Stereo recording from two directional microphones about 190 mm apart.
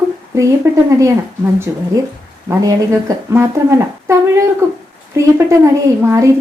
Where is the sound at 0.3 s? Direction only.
15° right (ahead or behind).